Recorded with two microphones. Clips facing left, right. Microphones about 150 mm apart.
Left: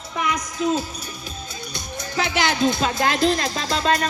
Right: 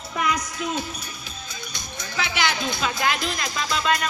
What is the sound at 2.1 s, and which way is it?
Speech, 45° left (ahead or behind).